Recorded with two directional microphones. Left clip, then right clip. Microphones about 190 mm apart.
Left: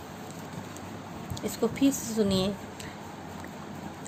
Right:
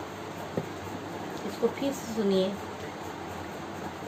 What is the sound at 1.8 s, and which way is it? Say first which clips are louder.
Speech: left 3 dB; 65° left (ahead or behind).